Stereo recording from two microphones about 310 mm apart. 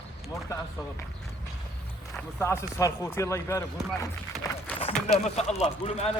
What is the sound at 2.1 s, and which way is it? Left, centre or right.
Speech, centre.